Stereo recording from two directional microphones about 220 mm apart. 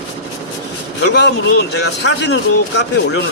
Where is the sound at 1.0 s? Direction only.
50° left (ahead or behind).